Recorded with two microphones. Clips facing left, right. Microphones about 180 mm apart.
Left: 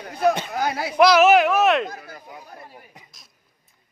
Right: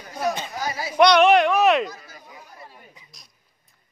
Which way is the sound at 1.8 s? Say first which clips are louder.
Left 3 dB; 60° left (ahead or behind).